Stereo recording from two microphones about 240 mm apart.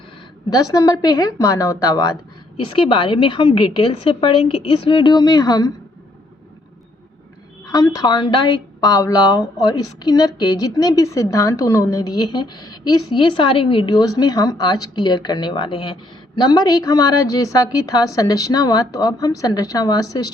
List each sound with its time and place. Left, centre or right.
0.5 s a woman's voice: centre
7.6 s speech: centre